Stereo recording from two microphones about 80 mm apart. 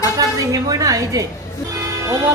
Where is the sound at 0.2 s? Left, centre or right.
Right.